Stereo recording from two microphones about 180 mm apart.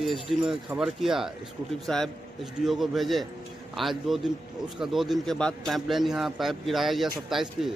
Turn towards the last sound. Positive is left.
turn(degrees=0)  # may be behind; listen again after turning